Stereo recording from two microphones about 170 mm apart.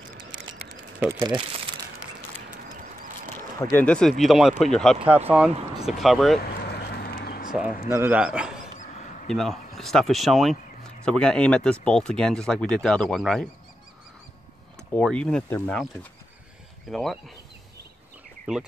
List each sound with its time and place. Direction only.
1.1 s speech: 25° right (ahead or behind)
3.3 s speech: 15° left (ahead or behind)
6.4 s a sound: 70° left (ahead or behind)
7.9 s a man's voice: 10° right (ahead or behind)
14.9 s speech: 5° left (ahead or behind)
18.5 s a man's voice: 5° right (ahead or behind)